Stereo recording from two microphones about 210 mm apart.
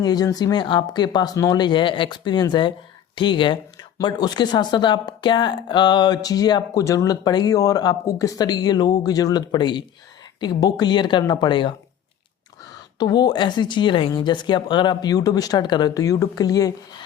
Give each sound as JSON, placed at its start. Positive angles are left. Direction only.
{"t": 0.0, "sound": "speech", "side_deg": 20}
{"t": 13.0, "sound": "speech", "side_deg": 20}